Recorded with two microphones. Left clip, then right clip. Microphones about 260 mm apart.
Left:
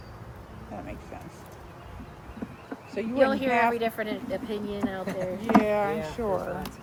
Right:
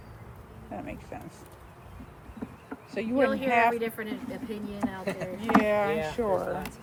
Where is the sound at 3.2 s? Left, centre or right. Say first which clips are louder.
Left 4 dB; centre.